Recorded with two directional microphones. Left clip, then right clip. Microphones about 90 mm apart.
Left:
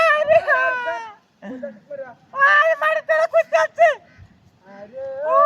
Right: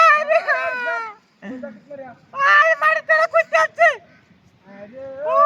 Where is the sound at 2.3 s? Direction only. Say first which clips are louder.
Right 1 dB; 30° right (ahead or behind).